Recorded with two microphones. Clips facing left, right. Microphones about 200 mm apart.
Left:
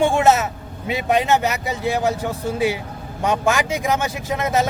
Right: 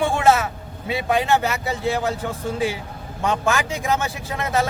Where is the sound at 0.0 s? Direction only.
20° left (ahead or behind).